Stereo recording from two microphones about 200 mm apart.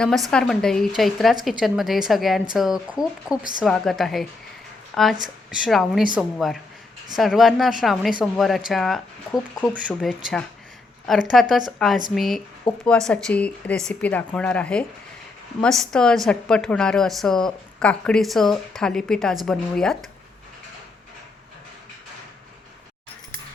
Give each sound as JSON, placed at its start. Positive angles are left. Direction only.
{"t": 0.3, "sound": "a woman's voice", "side_deg": 5}
{"t": 12.7, "sound": "speech", "side_deg": 25}
{"t": 13.1, "sound": "a woman's voice", "side_deg": 5}